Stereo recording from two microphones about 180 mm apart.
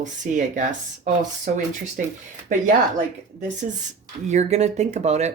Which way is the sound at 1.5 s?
55° right (ahead or behind).